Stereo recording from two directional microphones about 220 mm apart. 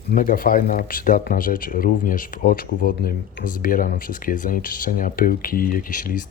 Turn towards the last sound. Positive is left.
turn(degrees=40)  # may be behind; listen again after turning